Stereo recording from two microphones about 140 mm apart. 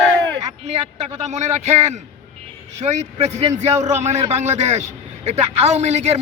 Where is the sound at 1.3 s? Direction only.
55° right (ahead or behind).